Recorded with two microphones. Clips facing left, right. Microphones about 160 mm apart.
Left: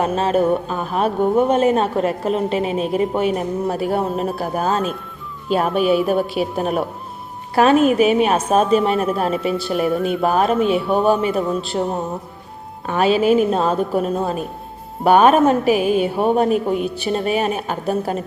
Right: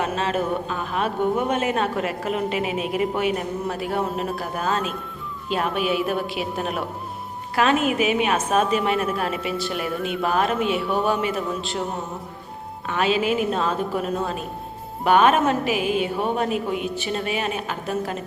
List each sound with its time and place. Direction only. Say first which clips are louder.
0.0 s speech: left 7 dB; 35° left (ahead or behind)
12.8 s speech: left 6 dB; 40° left (ahead or behind)